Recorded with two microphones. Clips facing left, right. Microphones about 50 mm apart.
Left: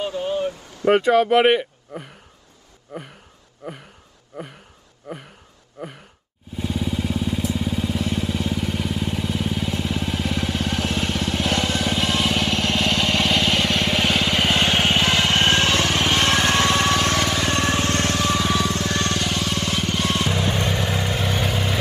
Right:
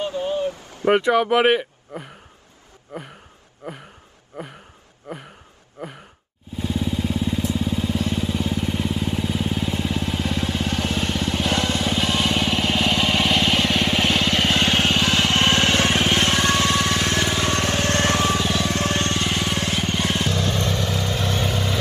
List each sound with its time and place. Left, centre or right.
0.2 s a sound: left
0.9 s speech: centre
2.9 s gasp: right
6.5 s vehicle: centre
15.6 s vehicle: right
16.3 s vehicle: left
17.4 s vehicle: right
18.6 s music: right
19.7 s music: centre
20.2 s vehicle: centre